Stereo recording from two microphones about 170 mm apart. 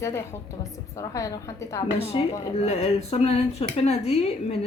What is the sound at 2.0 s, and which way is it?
Speech, 35° left (ahead or behind).